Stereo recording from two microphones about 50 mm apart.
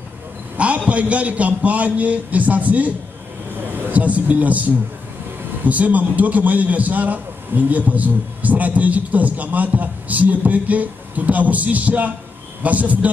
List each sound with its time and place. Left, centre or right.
0.6 s a man's voice: right